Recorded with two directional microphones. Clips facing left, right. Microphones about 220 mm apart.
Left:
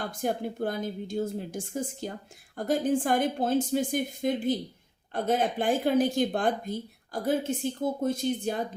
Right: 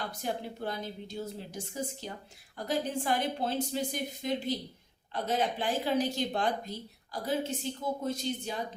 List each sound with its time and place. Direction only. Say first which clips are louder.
0.0 s speech: left 6 dB; 50° left (ahead or behind)